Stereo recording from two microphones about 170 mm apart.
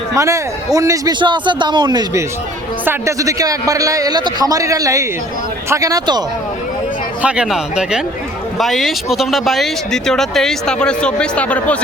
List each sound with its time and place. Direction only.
0.1 s a man's voice: 15° right (ahead or behind)
7.2 s speech: 5° right (ahead or behind)